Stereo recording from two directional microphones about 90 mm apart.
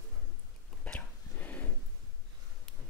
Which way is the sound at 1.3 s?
20° left (ahead or behind).